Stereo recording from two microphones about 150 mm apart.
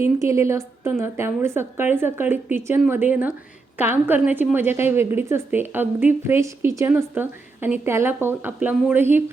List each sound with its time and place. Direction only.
0.0 s a woman's voice: 20° right (ahead or behind)